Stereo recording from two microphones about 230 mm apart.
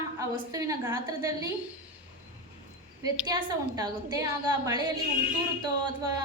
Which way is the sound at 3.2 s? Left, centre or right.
Centre.